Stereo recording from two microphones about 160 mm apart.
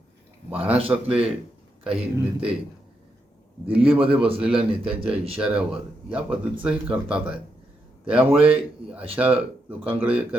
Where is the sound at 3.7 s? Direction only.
35° right (ahead or behind).